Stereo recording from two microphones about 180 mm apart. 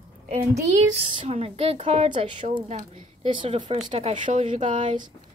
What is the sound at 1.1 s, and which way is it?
A woman's voice, 35° right (ahead or behind).